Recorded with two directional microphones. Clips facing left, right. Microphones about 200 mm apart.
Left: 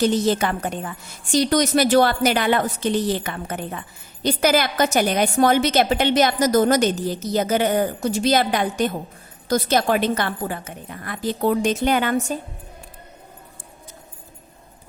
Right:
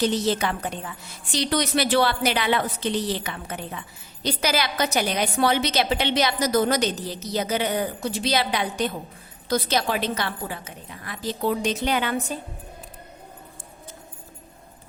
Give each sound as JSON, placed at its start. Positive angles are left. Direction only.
{"t": 0.0, "sound": "a woman's voice", "side_deg": 50}